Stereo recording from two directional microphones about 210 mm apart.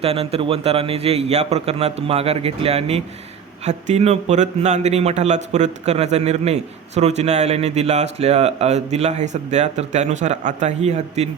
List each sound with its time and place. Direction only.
0.0 s a man's voice: 30° right (ahead or behind)